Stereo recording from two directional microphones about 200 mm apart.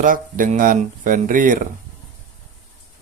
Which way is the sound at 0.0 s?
40° right (ahead or behind).